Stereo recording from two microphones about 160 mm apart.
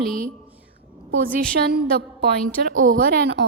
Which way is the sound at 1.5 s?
80° right.